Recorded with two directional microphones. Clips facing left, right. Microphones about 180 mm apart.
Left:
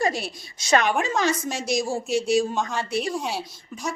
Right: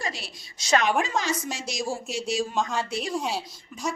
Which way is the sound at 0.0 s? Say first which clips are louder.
Left 9 dB; 50° left (ahead or behind).